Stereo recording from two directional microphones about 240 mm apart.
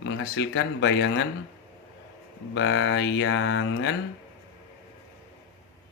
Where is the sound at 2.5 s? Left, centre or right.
Left.